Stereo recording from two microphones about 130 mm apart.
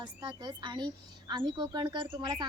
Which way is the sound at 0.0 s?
35° right (ahead or behind).